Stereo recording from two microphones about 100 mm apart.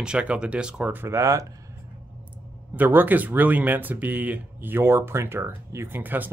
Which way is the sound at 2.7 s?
20° right (ahead or behind).